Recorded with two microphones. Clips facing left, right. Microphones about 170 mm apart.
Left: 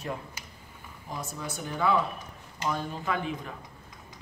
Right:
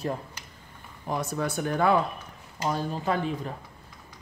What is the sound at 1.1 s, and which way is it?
Speech, 70° right (ahead or behind).